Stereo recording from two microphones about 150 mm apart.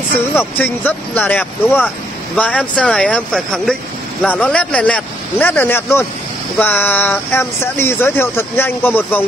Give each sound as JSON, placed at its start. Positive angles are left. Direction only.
{"t": 0.4, "sound": "speech", "side_deg": 10}